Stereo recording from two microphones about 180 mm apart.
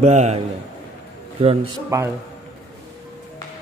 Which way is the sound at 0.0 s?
40° right (ahead or behind).